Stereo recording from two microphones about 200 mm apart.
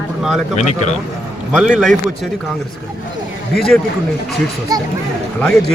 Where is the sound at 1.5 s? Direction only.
5° right (ahead or behind).